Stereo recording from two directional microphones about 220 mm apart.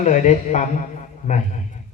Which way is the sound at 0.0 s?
30° left (ahead or behind).